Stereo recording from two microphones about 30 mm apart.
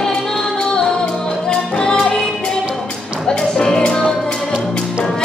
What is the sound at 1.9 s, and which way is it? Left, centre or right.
Music, left.